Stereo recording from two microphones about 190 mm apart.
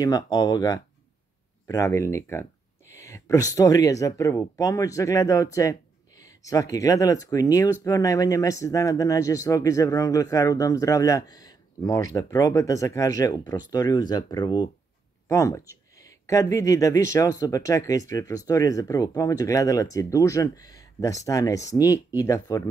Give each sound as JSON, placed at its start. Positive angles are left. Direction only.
{"t": 0.0, "sound": "speech", "side_deg": 20}